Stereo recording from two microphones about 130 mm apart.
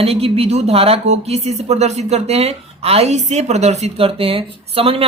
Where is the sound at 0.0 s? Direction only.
50° right (ahead or behind).